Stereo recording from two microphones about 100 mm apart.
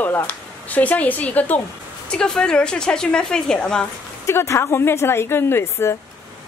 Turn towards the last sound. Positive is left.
turn(degrees=25)  # may be behind; listen again after turning